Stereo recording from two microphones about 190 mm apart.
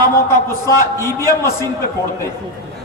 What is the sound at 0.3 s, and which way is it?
A man's voice, 15° left (ahead or behind).